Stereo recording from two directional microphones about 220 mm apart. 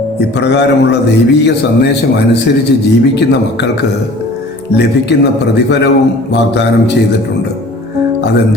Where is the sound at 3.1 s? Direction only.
50° left (ahead or behind).